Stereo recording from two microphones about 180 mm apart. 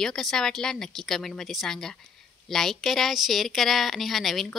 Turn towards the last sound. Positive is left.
turn(degrees=0)  # may be behind; listen again after turning